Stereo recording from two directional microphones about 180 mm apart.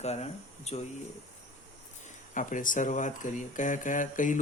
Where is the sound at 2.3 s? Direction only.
45° left (ahead or behind).